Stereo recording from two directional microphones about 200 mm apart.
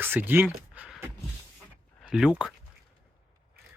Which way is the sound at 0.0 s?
10° right (ahead or behind).